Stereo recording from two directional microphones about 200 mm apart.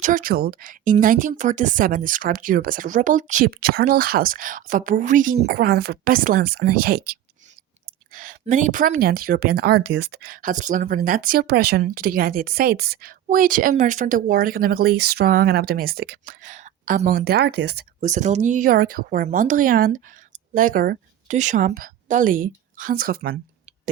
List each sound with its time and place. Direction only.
0.0 s speech: 40° right (ahead or behind)
8.1 s speech: 45° right (ahead or behind)
18.0 s speech: 35° right (ahead or behind)